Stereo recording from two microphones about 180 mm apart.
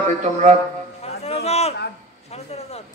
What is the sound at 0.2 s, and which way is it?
Speech, 40° right (ahead or behind).